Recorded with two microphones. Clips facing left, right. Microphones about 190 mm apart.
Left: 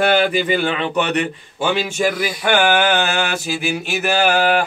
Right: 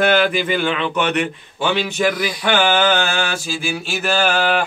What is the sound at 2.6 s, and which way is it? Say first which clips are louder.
Mantra: right 1 dB; 10° left (ahead or behind).